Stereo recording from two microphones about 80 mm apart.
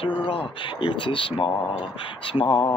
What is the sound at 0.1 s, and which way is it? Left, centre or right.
Speech, left.